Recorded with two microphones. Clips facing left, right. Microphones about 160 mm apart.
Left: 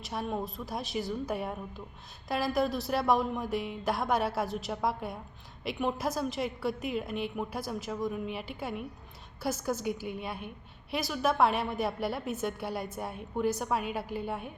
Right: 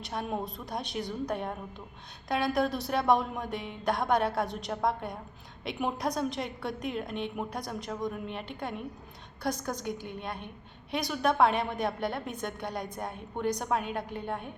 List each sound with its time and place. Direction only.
0.0 s a woman's voice: centre (ahead or behind)